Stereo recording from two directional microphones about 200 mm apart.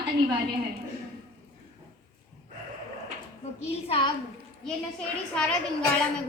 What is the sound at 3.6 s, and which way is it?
Speech, 30° left (ahead or behind).